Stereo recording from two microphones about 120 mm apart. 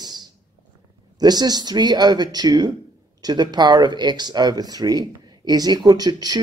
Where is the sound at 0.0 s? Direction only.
35° right (ahead or behind).